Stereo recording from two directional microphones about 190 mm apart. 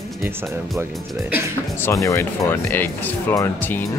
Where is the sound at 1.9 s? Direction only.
15° left (ahead or behind).